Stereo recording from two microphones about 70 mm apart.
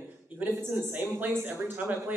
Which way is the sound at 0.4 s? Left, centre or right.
Right.